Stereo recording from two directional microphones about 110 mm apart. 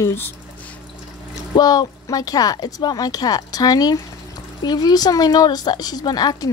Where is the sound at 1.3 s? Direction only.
35° left (ahead or behind).